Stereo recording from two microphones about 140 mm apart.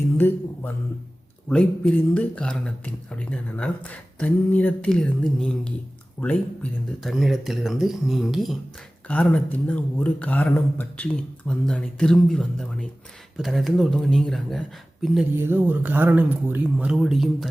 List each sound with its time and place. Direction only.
1.5 s speech: 10° left (ahead or behind)
7.0 s speech: centre (ahead or behind)
15.4 s speech: 15° right (ahead or behind); by 17.5 s centre (ahead or behind)